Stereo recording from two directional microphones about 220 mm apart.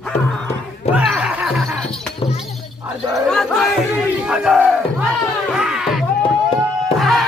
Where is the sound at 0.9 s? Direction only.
5° right (ahead or behind).